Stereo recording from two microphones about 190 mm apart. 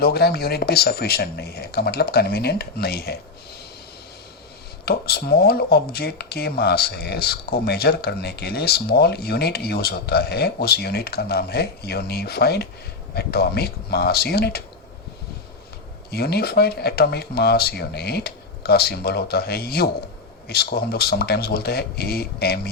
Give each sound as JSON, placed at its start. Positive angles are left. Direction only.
{"t": 0.0, "sound": "speech", "side_deg": 55}
{"t": 4.9, "sound": "speech", "side_deg": 55}
{"t": 16.1, "sound": "speech", "side_deg": 55}